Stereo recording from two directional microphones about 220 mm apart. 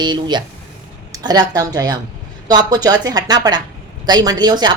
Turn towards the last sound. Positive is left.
turn(degrees=-20)  # may be behind; listen again after turning